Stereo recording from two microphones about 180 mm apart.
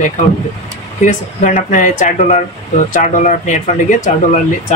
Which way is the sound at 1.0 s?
45° left (ahead or behind).